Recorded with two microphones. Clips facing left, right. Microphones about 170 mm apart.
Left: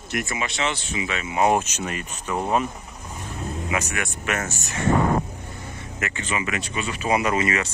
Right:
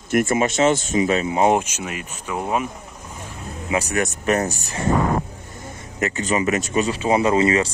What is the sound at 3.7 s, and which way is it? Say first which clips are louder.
Speech: right 8 dB; 35° right (ahead or behind).